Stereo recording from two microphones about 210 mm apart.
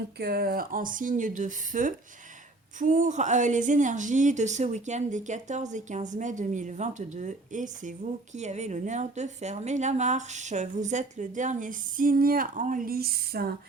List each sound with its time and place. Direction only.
0.2 s speech: 45° right (ahead or behind)